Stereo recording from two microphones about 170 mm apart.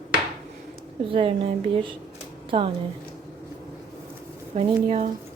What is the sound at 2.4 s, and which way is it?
Speech, 30° right (ahead or behind).